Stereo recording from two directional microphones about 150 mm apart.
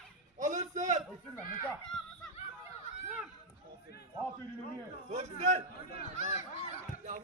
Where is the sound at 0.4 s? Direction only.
55° right (ahead or behind).